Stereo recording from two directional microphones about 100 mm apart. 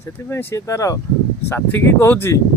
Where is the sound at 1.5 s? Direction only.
20° left (ahead or behind).